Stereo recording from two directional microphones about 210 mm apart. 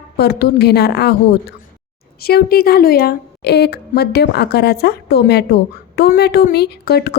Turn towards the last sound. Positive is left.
turn(degrees=50)  # may be behind; listen again after turning